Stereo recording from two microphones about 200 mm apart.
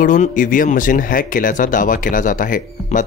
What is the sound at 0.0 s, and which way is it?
Speech, 40° left (ahead or behind).